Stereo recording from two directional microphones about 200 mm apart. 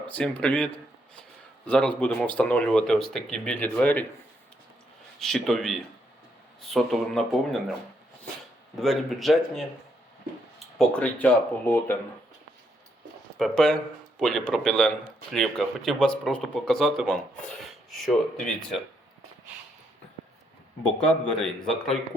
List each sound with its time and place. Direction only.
0.1 s speech: 5° left (ahead or behind)
5.2 s speech: centre (ahead or behind)
8.8 s speech: centre (ahead or behind)
10.8 s speech: 5° left (ahead or behind)
13.4 s speech: 5° left (ahead or behind)
20.8 s speech: 5° left (ahead or behind)